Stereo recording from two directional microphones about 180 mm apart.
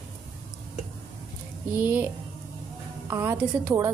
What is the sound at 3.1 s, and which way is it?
Speech, 15° right (ahead or behind).